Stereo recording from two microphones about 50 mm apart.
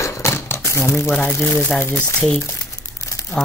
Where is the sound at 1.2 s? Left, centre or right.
Left.